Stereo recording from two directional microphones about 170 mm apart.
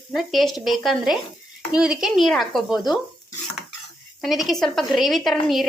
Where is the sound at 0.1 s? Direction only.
Centre (ahead or behind).